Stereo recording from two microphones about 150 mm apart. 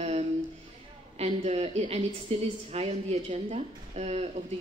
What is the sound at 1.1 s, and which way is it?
A woman's voice, 45° right (ahead or behind).